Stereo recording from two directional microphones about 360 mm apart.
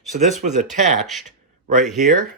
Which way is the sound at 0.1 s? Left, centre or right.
Centre.